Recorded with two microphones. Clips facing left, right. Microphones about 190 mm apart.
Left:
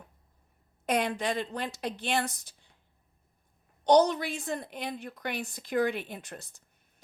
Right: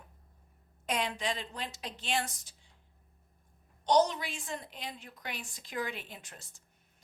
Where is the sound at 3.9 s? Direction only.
60° left (ahead or behind).